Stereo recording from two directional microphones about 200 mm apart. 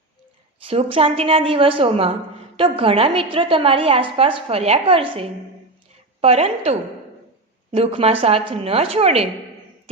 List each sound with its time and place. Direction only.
0.7 s a woman's voice: 30° right (ahead or behind)
7.7 s a woman's voice: 30° right (ahead or behind)